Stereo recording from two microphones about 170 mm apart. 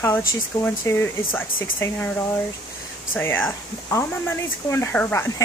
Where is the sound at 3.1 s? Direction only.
10° left (ahead or behind).